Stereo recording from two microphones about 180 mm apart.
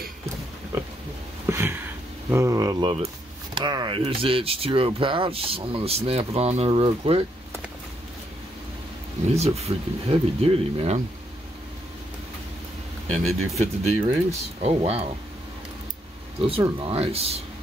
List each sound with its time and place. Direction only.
1.5 s a sound: 15° right (ahead or behind)
2.2 s speech: 15° right (ahead or behind); by 7.2 s 35° right (ahead or behind)
9.3 s speech: 35° right (ahead or behind)
13.1 s speech: 35° right (ahead or behind)
16.4 s speech: 30° right (ahead or behind)